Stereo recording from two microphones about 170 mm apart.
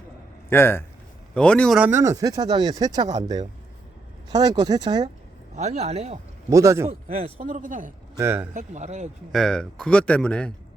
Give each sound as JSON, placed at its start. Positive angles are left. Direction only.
{"t": 0.5, "sound": "a man's voice", "side_deg": 15}
{"t": 1.8, "sound": "speech", "side_deg": -15}
{"t": 4.4, "sound": "speech", "side_deg": -25}
{"t": 5.5, "sound": "speech", "side_deg": -40}
{"t": 6.5, "sound": "speech", "side_deg": -20}
{"t": 7.3, "sound": "a man's voice", "side_deg": -50}
{"t": 8.1, "sound": "speech", "side_deg": -15}
{"t": 8.5, "sound": "a man's voice", "side_deg": -45}
{"t": 9.3, "sound": "speech", "side_deg": 5}